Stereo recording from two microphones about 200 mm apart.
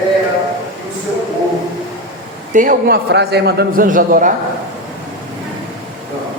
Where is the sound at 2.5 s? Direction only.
45° right (ahead or behind).